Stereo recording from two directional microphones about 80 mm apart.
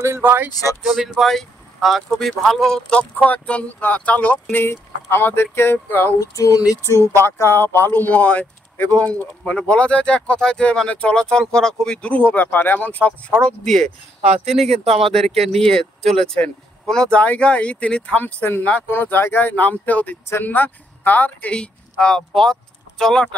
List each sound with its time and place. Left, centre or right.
0.0 s speech: right
0.5 s a sound: left
0.8 s speech: centre; by 6.1 s left
6.1 s a sound: left
6.9 s speech: left
13.4 s speech: centre
15.2 s speech: centre